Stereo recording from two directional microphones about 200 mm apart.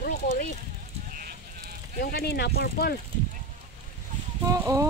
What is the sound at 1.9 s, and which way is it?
Speech, 50° left (ahead or behind).